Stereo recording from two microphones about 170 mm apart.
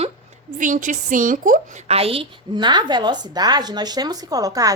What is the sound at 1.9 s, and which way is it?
A woman's voice, 35° right (ahead or behind).